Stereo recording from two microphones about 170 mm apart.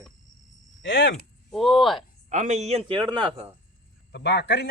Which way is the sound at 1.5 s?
Centre (ahead or behind).